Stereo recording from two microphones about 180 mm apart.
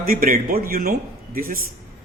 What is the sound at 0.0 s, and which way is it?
A man's voice, 50° right (ahead or behind).